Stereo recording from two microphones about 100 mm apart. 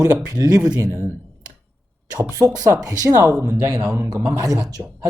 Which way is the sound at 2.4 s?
35° right (ahead or behind).